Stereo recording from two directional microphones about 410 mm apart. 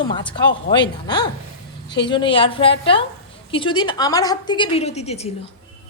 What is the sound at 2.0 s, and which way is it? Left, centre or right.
A woman's voice, centre.